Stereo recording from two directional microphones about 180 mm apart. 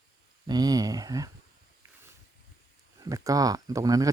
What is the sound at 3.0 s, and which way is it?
Speech, 20° right (ahead or behind).